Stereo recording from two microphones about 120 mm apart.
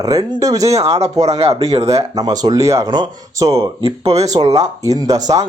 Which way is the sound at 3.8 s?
55° right (ahead or behind).